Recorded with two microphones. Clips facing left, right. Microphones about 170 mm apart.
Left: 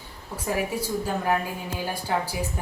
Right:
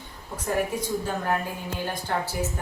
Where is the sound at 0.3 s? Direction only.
10° left (ahead or behind).